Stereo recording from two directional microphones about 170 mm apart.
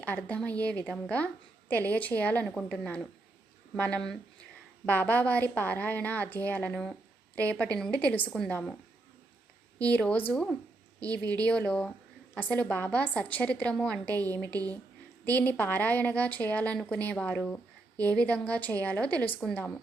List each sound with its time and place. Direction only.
0.0 s a woman's voice: 10° left (ahead or behind)
9.9 s a woman's voice: 10° left (ahead or behind)
11.1 s speech: 20° right (ahead or behind)
11.3 s a woman's voice: 5° left (ahead or behind)
14.5 s speech: 20° right (ahead or behind)
15.2 s a woman's voice: 10° left (ahead or behind)